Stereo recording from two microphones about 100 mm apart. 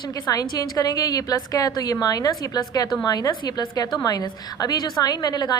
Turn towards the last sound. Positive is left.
turn(degrees=45)  # may be behind; listen again after turning